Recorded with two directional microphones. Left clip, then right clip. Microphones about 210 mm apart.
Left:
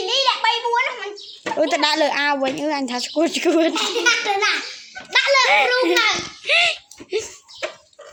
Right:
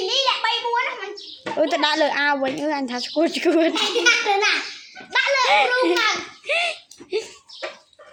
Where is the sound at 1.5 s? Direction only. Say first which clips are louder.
Left 1 dB; 10° left (ahead or behind).